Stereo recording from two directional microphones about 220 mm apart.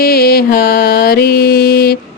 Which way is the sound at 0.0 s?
45° left (ahead or behind).